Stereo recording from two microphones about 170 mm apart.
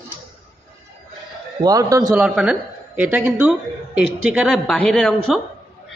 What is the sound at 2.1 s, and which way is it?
Speech, 5° right (ahead or behind).